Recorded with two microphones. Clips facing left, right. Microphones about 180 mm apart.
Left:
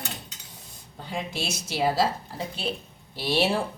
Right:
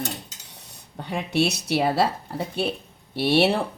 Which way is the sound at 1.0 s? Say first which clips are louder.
Right 8 dB; 65° right (ahead or behind).